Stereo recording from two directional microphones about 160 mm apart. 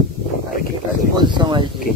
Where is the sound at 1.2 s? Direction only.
30° right (ahead or behind).